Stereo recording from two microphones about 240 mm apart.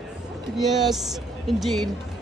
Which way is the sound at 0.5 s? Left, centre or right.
Centre.